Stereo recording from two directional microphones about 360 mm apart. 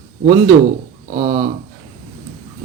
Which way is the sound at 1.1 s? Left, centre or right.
Right.